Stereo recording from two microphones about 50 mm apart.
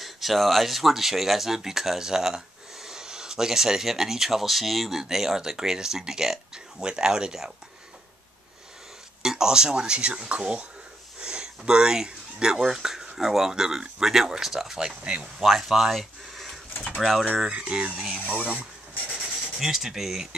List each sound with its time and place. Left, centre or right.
0.0 s speech: centre
9.2 s speech: centre
17.5 s speech: right
17.9 s speech: centre
18.2 s a sound: right
19.2 s speech: centre